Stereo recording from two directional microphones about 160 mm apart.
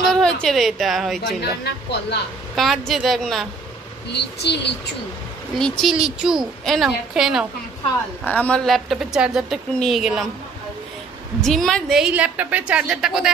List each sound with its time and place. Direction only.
0.1 s a woman's voice: 5° left (ahead or behind)
1.6 s speech: 90° left
2.5 s speech: centre (ahead or behind)
4.1 s speech: 90° left
5.6 s speech: centre (ahead or behind)
8.2 s speech: 10° left (ahead or behind)
11.4 s speech: centre (ahead or behind)